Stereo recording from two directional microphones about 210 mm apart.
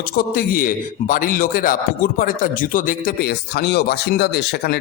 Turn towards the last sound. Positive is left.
turn(degrees=50)  # may be behind; listen again after turning